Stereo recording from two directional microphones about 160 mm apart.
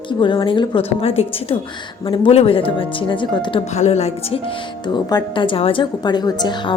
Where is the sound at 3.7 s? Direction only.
45° left (ahead or behind).